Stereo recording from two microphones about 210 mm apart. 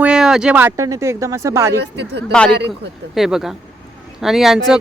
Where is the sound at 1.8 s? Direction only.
55° right (ahead or behind).